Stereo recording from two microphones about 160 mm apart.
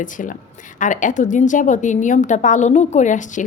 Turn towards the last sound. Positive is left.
turn(degrees=50)  # may be behind; listen again after turning